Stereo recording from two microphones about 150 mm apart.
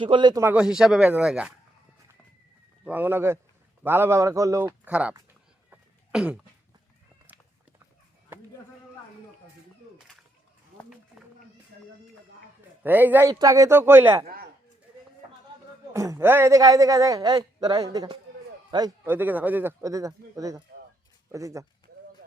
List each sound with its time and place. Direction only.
0.0 s speech: 30° right (ahead or behind)
0.4 s speech: 5° right (ahead or behind)
2.8 s a man's voice: 10° right (ahead or behind)
4.9 s a man's voice: 10° right (ahead or behind)
5.7 s cough: 10° right (ahead or behind)
12.8 s a man's voice: 10° right (ahead or behind)
15.9 s a man's voice: 20° right (ahead or behind)
19.0 s a man's voice: 15° right (ahead or behind)